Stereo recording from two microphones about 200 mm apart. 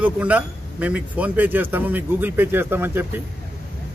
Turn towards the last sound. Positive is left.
turn(degrees=-10)  # may be behind; listen again after turning